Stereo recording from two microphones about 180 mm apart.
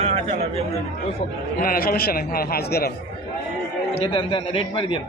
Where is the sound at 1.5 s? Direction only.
55° left (ahead or behind).